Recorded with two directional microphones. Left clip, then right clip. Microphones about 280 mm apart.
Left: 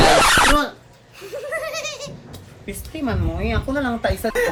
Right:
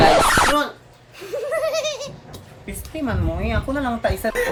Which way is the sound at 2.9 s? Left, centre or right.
Centre.